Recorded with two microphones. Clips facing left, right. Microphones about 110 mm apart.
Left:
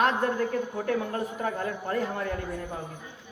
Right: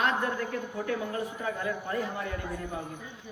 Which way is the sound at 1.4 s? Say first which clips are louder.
Left 2 dB; 50° left (ahead or behind).